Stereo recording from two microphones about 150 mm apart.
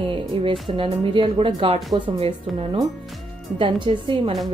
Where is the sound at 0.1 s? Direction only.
35° right (ahead or behind).